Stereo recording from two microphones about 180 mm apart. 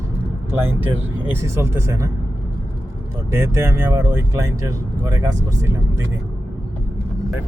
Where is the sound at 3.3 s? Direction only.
15° right (ahead or behind).